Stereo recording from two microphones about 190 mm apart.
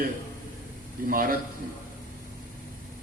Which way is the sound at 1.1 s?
50° right (ahead or behind).